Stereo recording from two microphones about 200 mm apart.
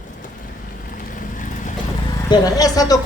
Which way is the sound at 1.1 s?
40° left (ahead or behind).